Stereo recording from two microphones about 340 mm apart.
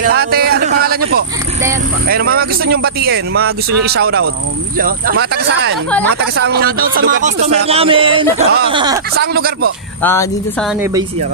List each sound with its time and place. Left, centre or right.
0.0 s a sound: right
2.0 s speech: right
9.2 s speech: right
10.0 s speech: centre